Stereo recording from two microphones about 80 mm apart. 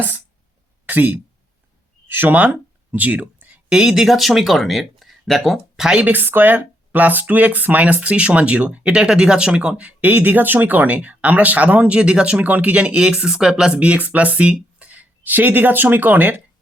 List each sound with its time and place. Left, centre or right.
0.9 s speech: right
6.1 s speech: right